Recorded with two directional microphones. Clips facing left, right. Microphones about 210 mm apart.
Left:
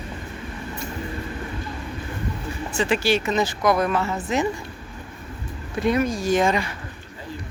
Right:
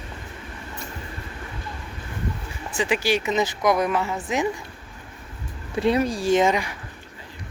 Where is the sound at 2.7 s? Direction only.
15° right (ahead or behind).